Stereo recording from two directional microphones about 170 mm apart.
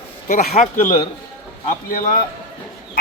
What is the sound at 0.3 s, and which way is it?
Speech, 45° left (ahead or behind).